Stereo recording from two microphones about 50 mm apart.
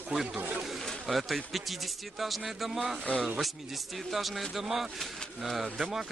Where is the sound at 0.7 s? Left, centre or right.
Centre.